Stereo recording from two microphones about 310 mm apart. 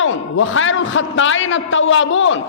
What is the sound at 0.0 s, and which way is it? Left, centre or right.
A man's voice, left.